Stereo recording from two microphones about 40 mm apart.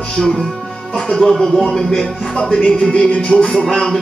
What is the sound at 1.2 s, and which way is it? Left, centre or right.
Speech, centre.